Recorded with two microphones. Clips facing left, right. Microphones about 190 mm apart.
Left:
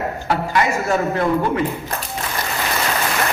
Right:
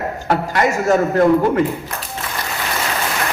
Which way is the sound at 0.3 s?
45° right (ahead or behind).